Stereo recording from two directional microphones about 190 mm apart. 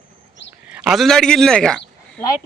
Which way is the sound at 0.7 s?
5° right (ahead or behind).